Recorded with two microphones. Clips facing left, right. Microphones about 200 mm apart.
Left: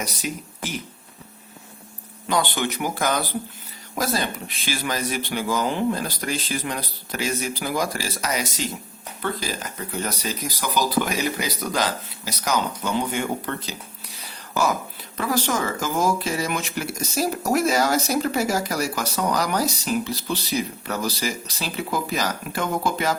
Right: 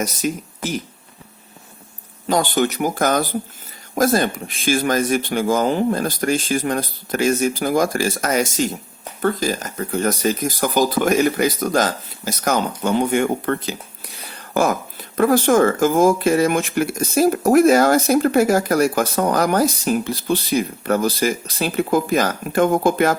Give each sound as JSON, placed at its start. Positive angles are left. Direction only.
{"t": 0.0, "sound": "speech", "side_deg": -45}
{"t": 2.2, "sound": "speech", "side_deg": -40}